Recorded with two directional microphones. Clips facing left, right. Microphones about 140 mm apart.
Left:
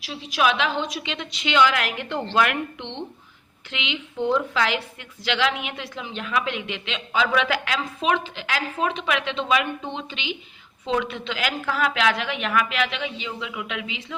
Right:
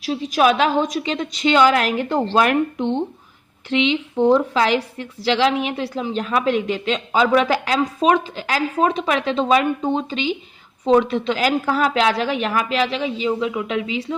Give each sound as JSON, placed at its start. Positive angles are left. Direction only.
{"t": 0.0, "sound": "a woman's voice", "side_deg": -40}